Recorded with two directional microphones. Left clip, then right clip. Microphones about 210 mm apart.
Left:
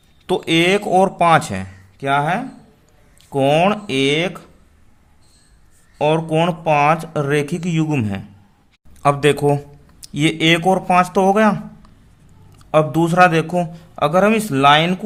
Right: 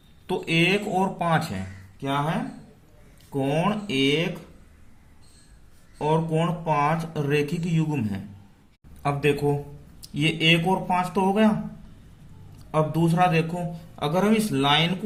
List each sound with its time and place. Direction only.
0.3 s speech: 40° left (ahead or behind)
3.3 s speech: 45° left (ahead or behind)
6.0 s speech: 40° left (ahead or behind)
12.7 s speech: 40° left (ahead or behind)